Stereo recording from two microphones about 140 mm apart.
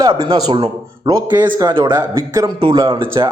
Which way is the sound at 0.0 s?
30° right (ahead or behind).